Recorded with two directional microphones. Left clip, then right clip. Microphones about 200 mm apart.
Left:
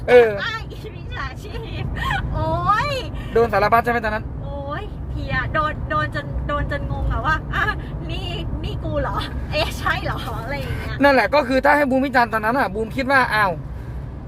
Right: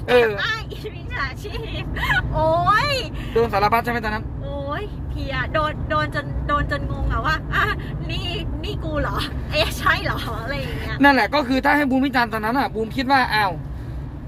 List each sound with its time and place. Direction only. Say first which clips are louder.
0.1 s speech: left 4 dB; 15° left (ahead or behind)
0.3 s speech: right 2 dB; 10° right (ahead or behind)
2.0 s speech: right 4 dB; 5° right (ahead or behind)
3.3 s speech: left 2 dB; 25° left (ahead or behind)
5.3 s speech: left 1 dB; 5° right (ahead or behind)
9.0 s speech: left 1 dB; 10° right (ahead or behind)
11.0 s speech: left 1 dB; 20° left (ahead or behind)